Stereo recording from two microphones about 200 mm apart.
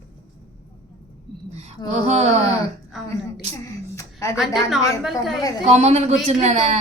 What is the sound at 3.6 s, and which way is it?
Speech, 15° left (ahead or behind).